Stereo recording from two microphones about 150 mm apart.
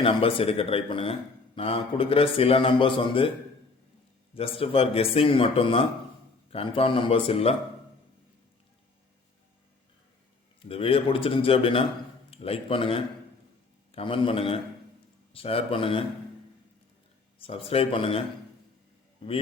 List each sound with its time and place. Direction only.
0.0 s a man's voice: 40° left (ahead or behind)
4.4 s a man's voice: 40° left (ahead or behind)
10.6 s a man's voice: 40° left (ahead or behind)
17.3 s a man's voice: 40° left (ahead or behind)